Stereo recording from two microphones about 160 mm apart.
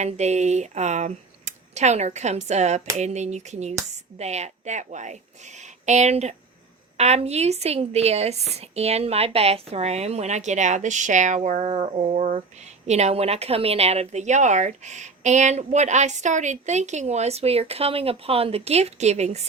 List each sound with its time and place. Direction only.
0.0 s a woman's voice: 45° right (ahead or behind)